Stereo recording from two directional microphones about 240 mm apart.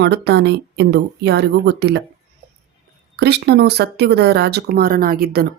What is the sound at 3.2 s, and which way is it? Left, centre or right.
Speech, right.